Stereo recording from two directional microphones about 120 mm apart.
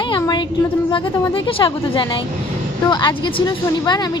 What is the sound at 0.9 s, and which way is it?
A woman's voice, 45° left (ahead or behind).